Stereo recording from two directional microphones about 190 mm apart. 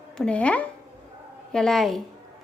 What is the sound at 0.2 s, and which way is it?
A woman's voice, 5° left (ahead or behind).